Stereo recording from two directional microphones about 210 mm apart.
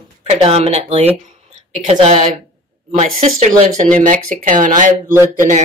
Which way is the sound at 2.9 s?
35° right (ahead or behind).